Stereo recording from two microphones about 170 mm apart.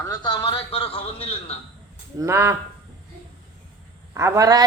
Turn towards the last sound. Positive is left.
turn(degrees=-20)  # may be behind; listen again after turning